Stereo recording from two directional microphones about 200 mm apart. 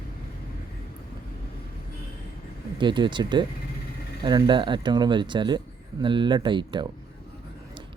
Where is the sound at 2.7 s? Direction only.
25° right (ahead or behind).